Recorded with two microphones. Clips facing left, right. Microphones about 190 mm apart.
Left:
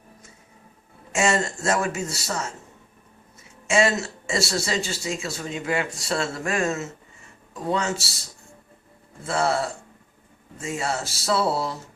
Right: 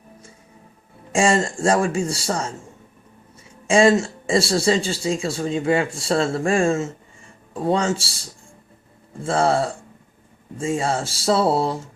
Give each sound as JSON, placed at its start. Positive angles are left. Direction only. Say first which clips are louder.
{"t": 1.1, "sound": "speech", "louder": "right 4 dB", "side_deg": -30}
{"t": 3.7, "sound": "a man's voice", "louder": "right 6 dB", "side_deg": -30}
{"t": 9.2, "sound": "a man's voice", "louder": "right 4 dB", "side_deg": -30}